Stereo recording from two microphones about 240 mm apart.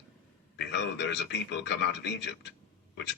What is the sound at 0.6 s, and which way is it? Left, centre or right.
A man's voice, left.